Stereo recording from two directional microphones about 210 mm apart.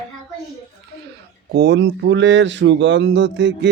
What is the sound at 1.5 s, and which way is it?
Speech, 55° right (ahead or behind).